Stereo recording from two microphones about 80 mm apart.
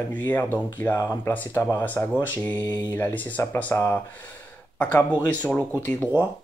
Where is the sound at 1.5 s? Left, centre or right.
Left.